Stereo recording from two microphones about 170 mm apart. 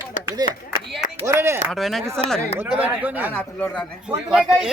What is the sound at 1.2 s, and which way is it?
Speech, 15° right (ahead or behind).